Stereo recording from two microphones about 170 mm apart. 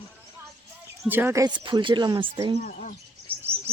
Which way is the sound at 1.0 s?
10° right (ahead or behind).